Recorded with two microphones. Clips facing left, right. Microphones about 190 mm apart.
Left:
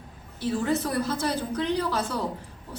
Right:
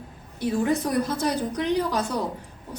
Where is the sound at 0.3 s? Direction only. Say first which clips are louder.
Right 2 dB; 15° right (ahead or behind).